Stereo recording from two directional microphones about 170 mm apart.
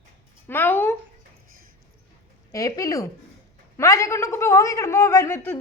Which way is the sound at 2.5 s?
20° left (ahead or behind).